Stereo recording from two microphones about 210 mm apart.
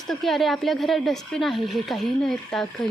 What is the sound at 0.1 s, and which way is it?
Speech, centre (ahead or behind).